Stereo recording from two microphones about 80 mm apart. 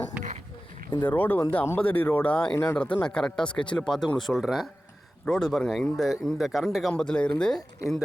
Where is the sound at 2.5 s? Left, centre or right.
Left.